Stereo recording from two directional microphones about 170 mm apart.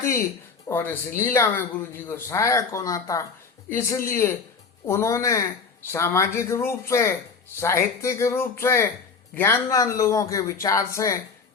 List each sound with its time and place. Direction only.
0.7 s speech: 15° left (ahead or behind)